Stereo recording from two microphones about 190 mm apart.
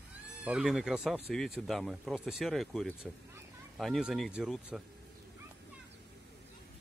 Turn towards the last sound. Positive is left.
turn(degrees=-5)  # may be behind; listen again after turning